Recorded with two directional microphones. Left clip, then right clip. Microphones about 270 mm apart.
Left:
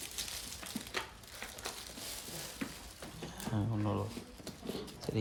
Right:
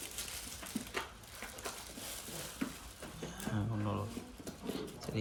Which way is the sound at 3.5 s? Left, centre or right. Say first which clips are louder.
Left 4 dB; centre.